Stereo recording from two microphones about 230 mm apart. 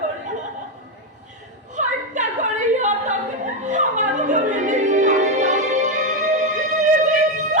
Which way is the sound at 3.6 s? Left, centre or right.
Right.